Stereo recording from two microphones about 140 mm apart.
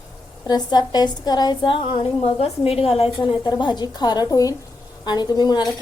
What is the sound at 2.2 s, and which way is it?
Speech, 50° left (ahead or behind).